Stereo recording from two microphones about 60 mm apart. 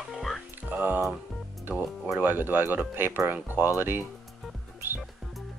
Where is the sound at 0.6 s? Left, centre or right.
Right.